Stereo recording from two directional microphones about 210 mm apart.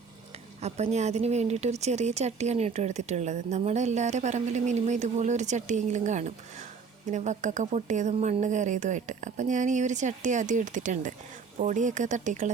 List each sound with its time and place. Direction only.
0.6 s speech: 30° right (ahead or behind)